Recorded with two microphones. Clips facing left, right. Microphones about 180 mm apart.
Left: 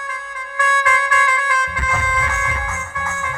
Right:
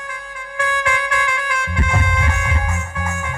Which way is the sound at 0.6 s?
30° right (ahead or behind).